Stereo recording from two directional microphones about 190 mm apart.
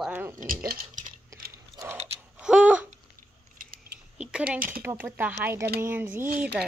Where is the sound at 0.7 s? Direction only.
45° right (ahead or behind).